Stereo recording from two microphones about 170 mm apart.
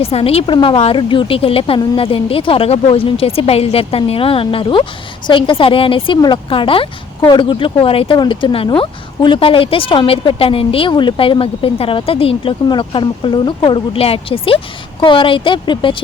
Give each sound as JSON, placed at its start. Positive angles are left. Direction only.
{"t": 0.0, "sound": "a woman's voice", "side_deg": 35}